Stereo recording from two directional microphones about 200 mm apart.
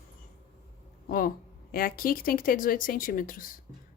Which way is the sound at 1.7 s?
45° left (ahead or behind).